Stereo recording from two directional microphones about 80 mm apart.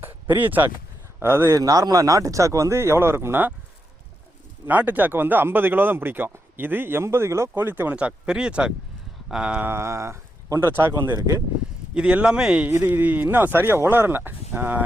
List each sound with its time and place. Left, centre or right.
0.0 s a sound: right
1.2 s speech: right
1.5 s speech: right
4.6 s speech: right
9.6 s speech: right
11.9 s speech: centre
12.6 s speech: right